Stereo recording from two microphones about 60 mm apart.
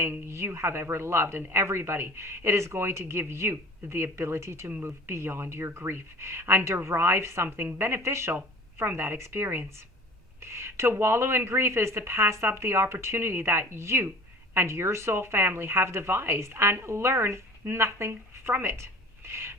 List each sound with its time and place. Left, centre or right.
0.0 s speech: right
7.4 s speech: right